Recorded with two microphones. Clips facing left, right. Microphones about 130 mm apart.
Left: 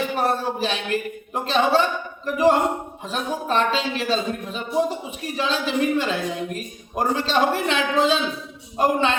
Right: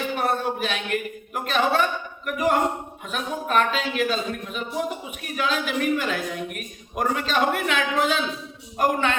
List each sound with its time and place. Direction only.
0.2 s a woman's voice: 35° left (ahead or behind)